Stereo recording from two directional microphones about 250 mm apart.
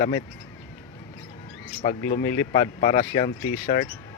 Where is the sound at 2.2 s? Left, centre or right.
Centre.